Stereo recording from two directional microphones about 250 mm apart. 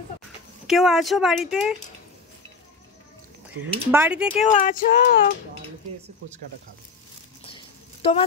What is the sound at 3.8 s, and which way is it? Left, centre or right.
Speech, centre.